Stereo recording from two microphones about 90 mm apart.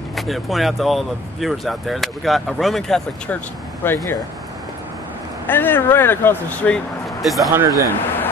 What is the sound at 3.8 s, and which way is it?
Speech, 25° left (ahead or behind).